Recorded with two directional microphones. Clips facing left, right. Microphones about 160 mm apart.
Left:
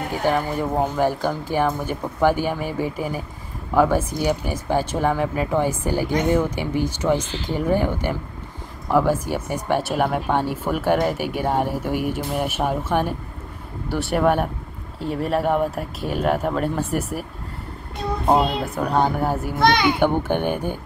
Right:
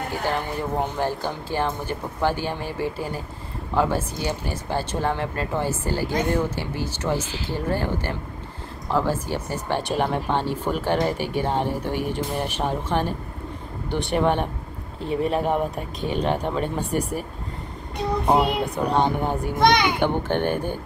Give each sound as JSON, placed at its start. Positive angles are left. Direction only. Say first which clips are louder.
{"t": 0.2, "sound": "speech", "louder": "left 6 dB", "side_deg": 15}
{"t": 7.2, "sound": "speech", "louder": "left 2 dB", "side_deg": -10}
{"t": 7.5, "sound": "speech", "louder": "left 5 dB", "side_deg": 15}
{"t": 18.6, "sound": "speech", "louder": "left 1 dB", "side_deg": 5}
{"t": 19.6, "sound": "speech", "louder": "even", "side_deg": -15}
{"t": 20.0, "sound": "speech", "louder": "left 2 dB", "side_deg": 10}